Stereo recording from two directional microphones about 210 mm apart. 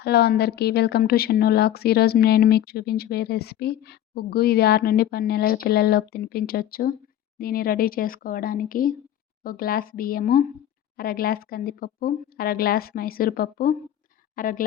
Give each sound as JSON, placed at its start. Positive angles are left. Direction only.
{"t": 0.0, "sound": "a woman's voice", "side_deg": 50}